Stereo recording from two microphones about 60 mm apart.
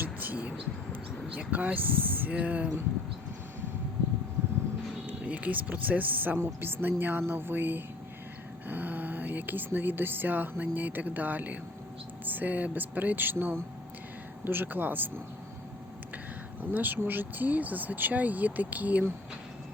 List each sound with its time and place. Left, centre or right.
0.0 s a sound: right
1.3 s speech: right
5.0 s speech: right
16.6 s speech: right